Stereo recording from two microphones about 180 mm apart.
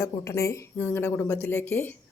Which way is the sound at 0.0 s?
15° left (ahead or behind).